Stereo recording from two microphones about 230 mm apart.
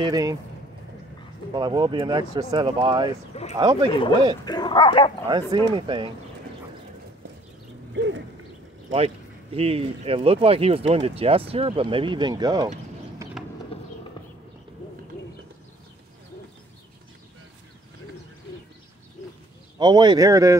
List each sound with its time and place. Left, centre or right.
0.0 s speech: centre
1.5 s speech: centre
4.5 s speech: centre
5.3 s speech: centre
7.9 s a sound: right
9.6 s speech: right
13.4 s a sound: centre
19.8 s speech: centre